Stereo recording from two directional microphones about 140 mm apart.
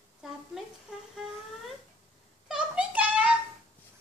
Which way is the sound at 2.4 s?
5° right (ahead or behind).